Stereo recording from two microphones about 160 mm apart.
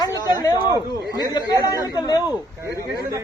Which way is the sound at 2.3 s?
15° right (ahead or behind).